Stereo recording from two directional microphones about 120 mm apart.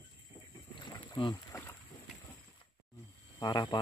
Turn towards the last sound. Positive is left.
turn(degrees=35)  # may be behind; listen again after turning